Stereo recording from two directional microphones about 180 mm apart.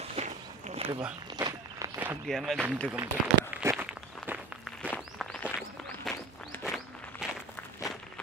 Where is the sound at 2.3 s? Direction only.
Centre (ahead or behind).